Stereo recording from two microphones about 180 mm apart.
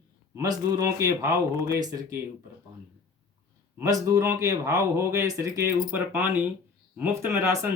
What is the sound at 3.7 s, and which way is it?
Speech, 15° right (ahead or behind).